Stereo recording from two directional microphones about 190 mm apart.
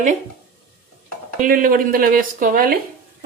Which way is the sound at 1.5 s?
50° right (ahead or behind).